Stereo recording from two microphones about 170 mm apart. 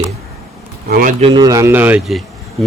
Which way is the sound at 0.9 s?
60° right (ahead or behind).